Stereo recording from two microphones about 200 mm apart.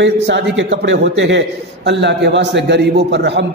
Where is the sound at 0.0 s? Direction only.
60° right (ahead or behind).